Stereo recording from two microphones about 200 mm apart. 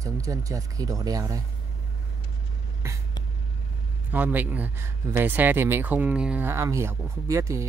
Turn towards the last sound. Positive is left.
turn(degrees=-15)  # may be behind; listen again after turning